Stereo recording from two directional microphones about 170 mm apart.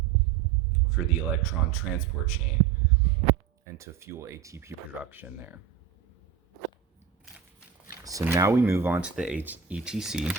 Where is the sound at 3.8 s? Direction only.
15° right (ahead or behind).